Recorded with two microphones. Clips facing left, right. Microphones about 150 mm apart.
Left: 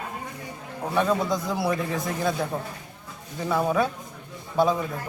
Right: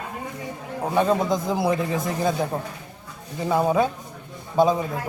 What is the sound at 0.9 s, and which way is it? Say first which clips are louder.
A man's voice: right 3 dB; 25° right (ahead or behind).